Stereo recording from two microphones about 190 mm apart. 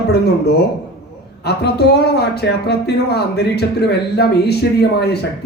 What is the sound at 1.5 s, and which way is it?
Speech, 60° left (ahead or behind).